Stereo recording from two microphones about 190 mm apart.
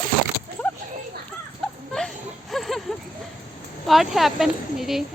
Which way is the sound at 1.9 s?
Centre (ahead or behind).